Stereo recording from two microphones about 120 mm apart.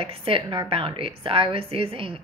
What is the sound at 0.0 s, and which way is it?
A woman's voice, 50° right (ahead or behind).